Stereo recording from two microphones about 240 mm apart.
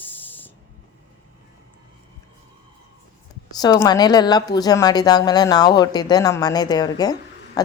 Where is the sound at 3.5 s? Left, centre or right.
Centre.